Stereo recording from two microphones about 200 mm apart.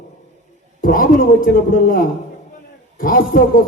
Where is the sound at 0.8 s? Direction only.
45° left (ahead or behind).